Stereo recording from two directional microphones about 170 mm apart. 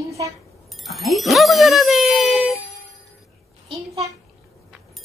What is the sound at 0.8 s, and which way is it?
Speech, centre (ahead or behind).